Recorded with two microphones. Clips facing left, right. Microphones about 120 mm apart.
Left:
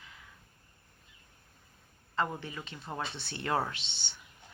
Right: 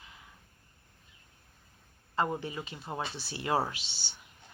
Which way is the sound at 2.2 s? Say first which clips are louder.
Right 2 dB; 15° right (ahead or behind).